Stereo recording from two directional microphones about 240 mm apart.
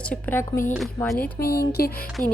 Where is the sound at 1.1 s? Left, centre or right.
Left.